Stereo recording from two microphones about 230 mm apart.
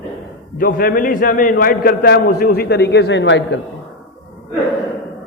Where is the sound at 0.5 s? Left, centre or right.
Left.